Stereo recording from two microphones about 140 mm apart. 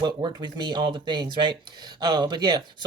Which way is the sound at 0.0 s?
30° right (ahead or behind).